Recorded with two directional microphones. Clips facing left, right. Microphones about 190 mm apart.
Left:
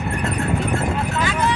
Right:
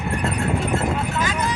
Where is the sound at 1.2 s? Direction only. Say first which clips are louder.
Left 3 dB; 40° right (ahead or behind).